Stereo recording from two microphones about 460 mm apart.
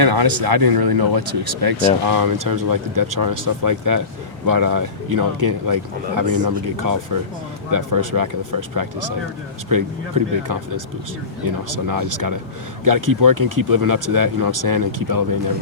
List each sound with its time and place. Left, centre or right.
0.0 s speech: right
11.7 s speech: right